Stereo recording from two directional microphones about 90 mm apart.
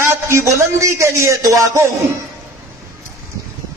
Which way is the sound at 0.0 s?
30° right (ahead or behind).